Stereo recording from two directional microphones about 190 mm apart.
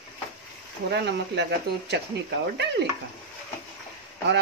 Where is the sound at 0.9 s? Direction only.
60° right (ahead or behind).